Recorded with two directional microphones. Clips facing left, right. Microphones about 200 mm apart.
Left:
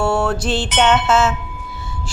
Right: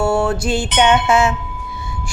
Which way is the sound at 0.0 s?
10° right (ahead or behind).